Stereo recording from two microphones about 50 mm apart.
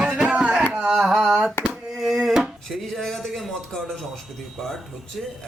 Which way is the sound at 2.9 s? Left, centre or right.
Centre.